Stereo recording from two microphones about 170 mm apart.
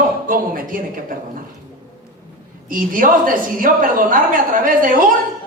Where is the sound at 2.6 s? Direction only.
55° right (ahead or behind).